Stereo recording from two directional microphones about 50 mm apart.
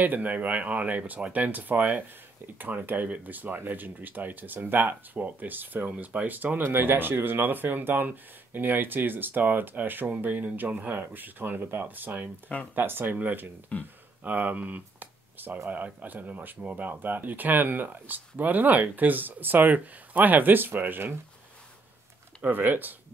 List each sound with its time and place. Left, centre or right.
0.0 s speech: right
13.7 s speech: left
14.2 s speech: right
22.4 s speech: right